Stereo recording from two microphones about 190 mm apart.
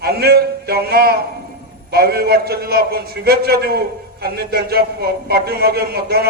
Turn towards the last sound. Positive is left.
turn(degrees=-55)  # may be behind; listen again after turning